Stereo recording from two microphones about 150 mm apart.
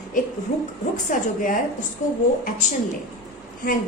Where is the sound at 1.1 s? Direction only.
60° left (ahead or behind).